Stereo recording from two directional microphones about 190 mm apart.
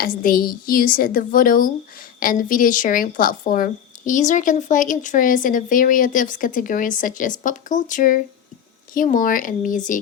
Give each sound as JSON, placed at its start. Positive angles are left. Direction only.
{"t": 0.2, "sound": "speech", "side_deg": 50}